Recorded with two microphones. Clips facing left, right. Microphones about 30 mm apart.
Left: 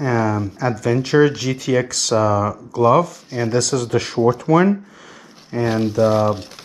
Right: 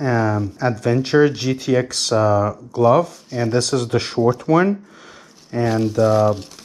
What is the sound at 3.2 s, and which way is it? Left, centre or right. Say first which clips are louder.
Speech: even; centre.